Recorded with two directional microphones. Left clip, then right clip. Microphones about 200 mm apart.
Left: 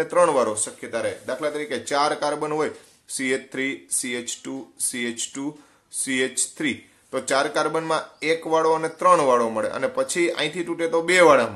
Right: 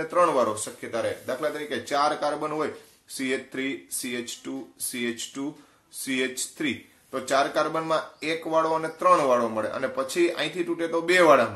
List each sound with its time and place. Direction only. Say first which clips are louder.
0.0 s speech: left 3 dB; 35° left (ahead or behind)